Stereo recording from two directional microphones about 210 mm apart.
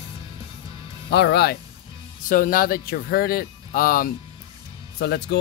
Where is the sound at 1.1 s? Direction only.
55° left (ahead or behind).